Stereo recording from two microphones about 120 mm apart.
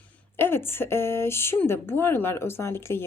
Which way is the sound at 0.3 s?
20° left (ahead or behind).